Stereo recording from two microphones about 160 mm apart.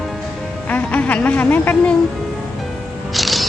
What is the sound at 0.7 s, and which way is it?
Speech, 10° left (ahead or behind).